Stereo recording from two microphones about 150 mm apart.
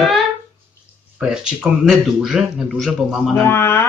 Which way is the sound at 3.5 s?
15° left (ahead or behind).